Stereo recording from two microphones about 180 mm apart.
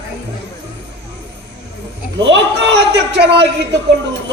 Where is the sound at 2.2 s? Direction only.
80° right.